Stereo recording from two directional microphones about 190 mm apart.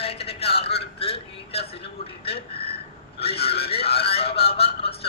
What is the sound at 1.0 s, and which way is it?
A man's voice, 30° left (ahead or behind).